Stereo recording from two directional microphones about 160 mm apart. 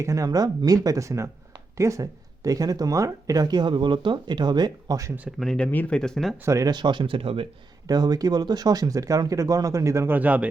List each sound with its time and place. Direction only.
0.0 s speech: 20° right (ahead or behind)
5.4 s speech: 5° left (ahead or behind)
6.3 s speech: 15° right (ahead or behind); by 7.4 s 35° right (ahead or behind)
7.9 s speech: 25° right (ahead or behind); by 10.5 s 10° right (ahead or behind)